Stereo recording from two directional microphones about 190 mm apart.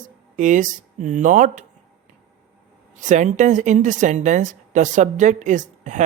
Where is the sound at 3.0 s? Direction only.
40° right (ahead or behind).